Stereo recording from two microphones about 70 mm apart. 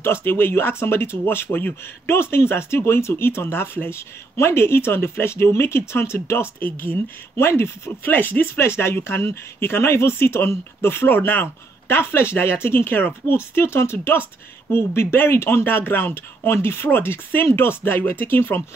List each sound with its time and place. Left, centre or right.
0.0 s speech: left